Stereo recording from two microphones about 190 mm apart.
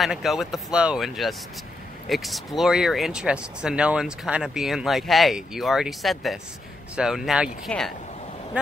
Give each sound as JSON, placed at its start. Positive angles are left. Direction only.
{"t": 0.0, "sound": "speech", "side_deg": 0}